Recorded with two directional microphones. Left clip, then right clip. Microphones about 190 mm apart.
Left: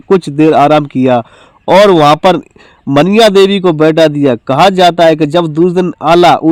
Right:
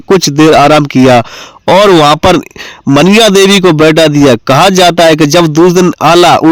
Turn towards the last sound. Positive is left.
turn(degrees=-35)  # may be behind; listen again after turning